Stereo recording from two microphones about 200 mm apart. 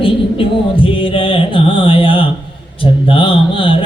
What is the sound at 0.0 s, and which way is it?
Music, 25° left (ahead or behind).